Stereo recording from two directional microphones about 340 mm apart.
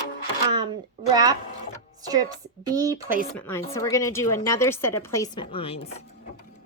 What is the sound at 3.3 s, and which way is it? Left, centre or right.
A woman's voice, centre.